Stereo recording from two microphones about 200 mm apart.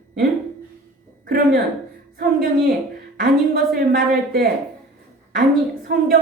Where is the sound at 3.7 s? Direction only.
50° right (ahead or behind).